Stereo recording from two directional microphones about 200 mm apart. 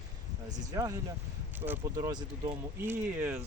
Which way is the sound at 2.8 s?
10° right (ahead or behind).